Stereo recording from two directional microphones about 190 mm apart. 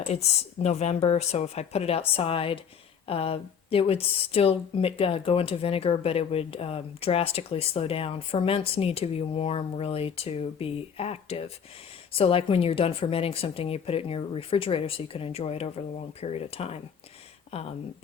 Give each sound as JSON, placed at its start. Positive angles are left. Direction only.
{"t": 0.0, "sound": "speech", "side_deg": 35}